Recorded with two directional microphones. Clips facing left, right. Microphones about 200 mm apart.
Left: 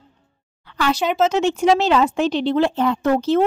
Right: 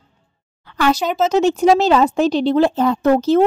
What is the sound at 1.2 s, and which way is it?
Speech, 40° right (ahead or behind).